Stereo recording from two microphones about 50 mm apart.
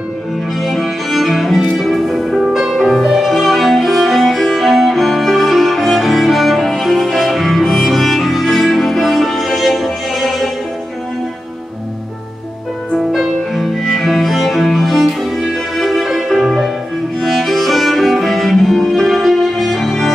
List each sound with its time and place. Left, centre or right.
0.6 s music: centre
13.1 s music: centre